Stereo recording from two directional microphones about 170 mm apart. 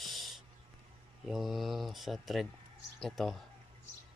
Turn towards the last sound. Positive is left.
turn(degrees=0)  # may be behind; listen again after turning